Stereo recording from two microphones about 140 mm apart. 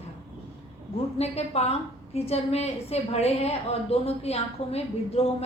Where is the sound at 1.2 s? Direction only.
50° left (ahead or behind).